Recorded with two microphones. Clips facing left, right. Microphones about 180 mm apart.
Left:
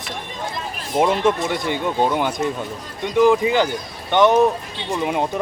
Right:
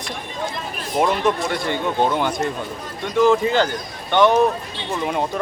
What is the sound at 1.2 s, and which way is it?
Speech, 25° left (ahead or behind).